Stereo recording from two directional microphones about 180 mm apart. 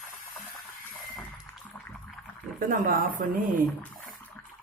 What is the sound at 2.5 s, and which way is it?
Speech, 45° right (ahead or behind).